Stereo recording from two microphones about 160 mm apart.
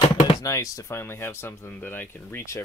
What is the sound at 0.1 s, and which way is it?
Speech, 25° left (ahead or behind).